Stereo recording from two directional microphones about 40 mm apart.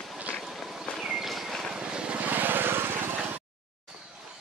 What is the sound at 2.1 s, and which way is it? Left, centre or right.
Vehicle, right.